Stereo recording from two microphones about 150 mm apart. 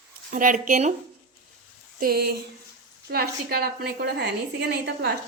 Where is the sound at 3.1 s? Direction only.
90° right.